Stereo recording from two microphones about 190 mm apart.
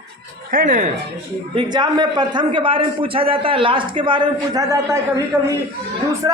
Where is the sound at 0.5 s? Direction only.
45° right (ahead or behind).